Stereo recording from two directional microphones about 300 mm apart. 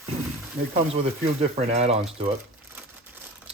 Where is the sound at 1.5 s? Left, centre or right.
Right.